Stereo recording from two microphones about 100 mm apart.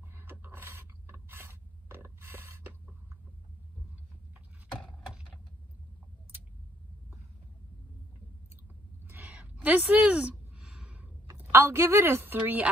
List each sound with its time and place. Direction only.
0.1 s mechanisms: 20° right (ahead or behind)
9.0 s a sound: 20° right (ahead or behind)
11.3 s a woman's voice: 30° right (ahead or behind)